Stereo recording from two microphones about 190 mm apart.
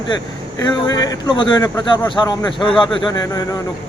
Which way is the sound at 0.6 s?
20° left (ahead or behind).